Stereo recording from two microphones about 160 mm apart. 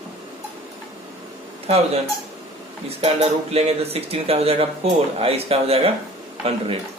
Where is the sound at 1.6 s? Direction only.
40° right (ahead or behind).